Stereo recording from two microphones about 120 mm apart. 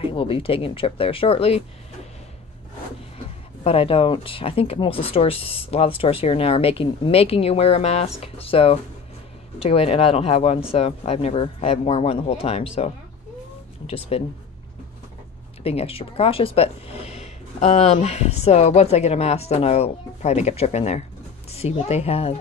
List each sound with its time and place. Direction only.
0.0 s speech: 45° left (ahead or behind)
3.6 s speech: 50° left (ahead or behind)
15.6 s speech: 55° left (ahead or behind)